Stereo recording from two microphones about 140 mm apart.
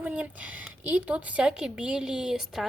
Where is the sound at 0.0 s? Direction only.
10° right (ahead or behind).